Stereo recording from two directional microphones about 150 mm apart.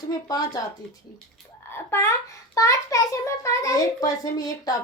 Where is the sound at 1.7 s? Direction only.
15° left (ahead or behind).